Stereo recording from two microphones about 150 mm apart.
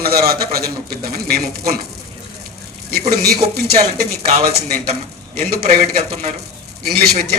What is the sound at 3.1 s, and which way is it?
Speech, 90° right.